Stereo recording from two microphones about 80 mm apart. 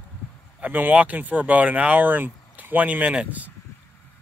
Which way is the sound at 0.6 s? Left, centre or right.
Right.